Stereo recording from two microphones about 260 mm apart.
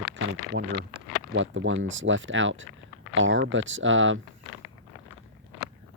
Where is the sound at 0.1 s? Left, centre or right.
Right.